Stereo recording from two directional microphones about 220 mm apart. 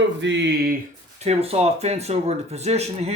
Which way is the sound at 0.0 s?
55° right (ahead or behind).